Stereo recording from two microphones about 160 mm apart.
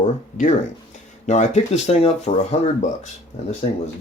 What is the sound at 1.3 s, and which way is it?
Speech, 45° left (ahead or behind).